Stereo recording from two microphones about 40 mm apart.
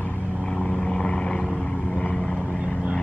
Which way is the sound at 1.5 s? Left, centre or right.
Left.